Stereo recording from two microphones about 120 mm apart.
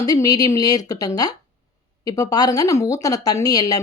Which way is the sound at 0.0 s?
30° left (ahead or behind).